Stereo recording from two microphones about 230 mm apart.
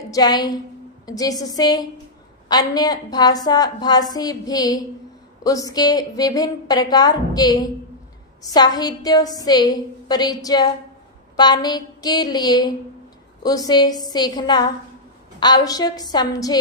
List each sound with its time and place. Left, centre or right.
0.1 s a woman's voice: centre